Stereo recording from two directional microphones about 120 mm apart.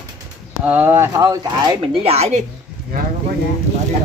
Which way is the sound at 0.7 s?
15° right (ahead or behind).